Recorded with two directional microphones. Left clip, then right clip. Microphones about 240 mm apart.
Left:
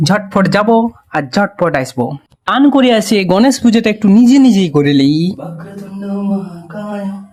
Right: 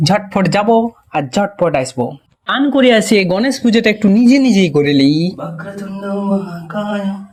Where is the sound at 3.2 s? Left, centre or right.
Centre.